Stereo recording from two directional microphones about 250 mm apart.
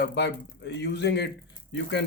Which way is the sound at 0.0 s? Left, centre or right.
Left.